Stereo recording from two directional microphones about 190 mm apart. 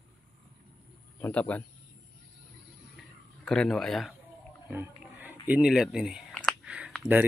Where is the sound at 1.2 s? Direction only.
5° left (ahead or behind).